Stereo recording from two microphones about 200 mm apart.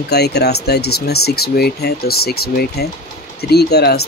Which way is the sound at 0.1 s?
55° left (ahead or behind).